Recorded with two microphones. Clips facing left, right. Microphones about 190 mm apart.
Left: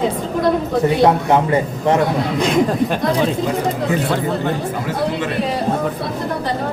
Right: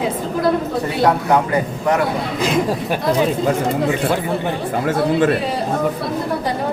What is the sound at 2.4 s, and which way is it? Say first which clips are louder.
Speech: left 3 dB; 5° right (ahead or behind).